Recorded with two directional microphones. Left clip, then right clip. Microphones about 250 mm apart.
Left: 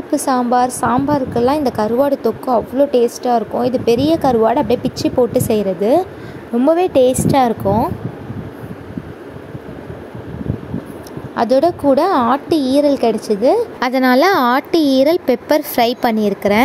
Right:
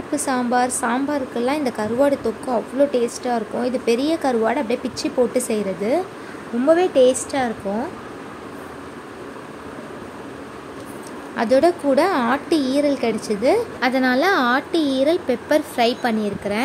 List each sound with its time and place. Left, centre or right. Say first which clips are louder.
0.1 s a woman's voice: left 6 dB; centre
11.3 s a woman's voice: left 3 dB; centre
13.7 s a woman's voice: left 5 dB; left